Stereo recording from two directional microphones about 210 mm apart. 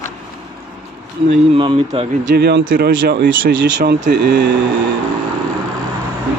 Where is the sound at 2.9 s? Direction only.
60° right (ahead or behind).